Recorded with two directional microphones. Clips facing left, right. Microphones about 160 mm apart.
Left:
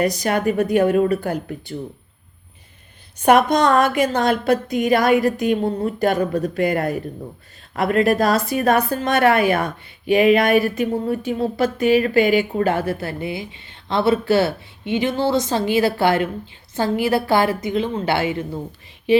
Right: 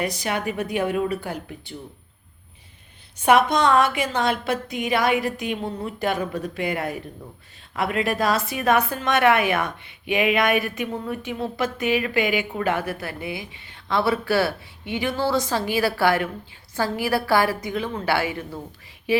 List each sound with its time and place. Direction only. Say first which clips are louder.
0.0 s a woman's voice: left 7 dB; 40° left (ahead or behind)
3.2 s a woman's voice: left 3 dB; 45° left (ahead or behind); by 19.2 s 20° left (ahead or behind)